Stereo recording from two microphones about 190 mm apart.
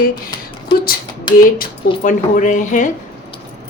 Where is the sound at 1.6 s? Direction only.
45° left (ahead or behind).